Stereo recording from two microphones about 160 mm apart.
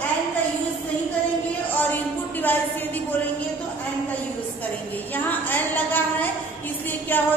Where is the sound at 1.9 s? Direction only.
10° left (ahead or behind).